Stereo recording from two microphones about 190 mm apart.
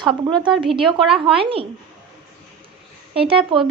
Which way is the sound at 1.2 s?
30° right (ahead or behind).